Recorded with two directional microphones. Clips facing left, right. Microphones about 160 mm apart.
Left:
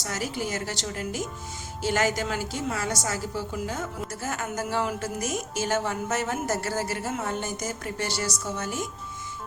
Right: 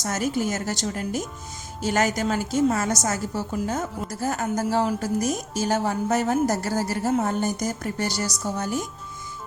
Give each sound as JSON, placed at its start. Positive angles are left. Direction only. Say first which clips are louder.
{"t": 0.0, "sound": "a woman's voice", "louder": "right 6 dB", "side_deg": -45}